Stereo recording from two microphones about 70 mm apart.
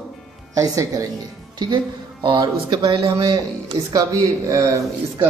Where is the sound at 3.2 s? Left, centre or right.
Right.